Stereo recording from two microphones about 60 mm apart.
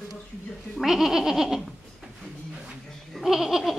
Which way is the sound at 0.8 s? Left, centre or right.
Centre.